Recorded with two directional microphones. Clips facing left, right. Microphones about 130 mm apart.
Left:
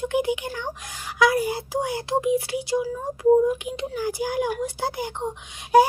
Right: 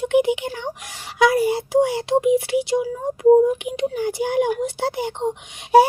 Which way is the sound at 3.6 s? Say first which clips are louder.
Right 5 dB; 20° right (ahead or behind).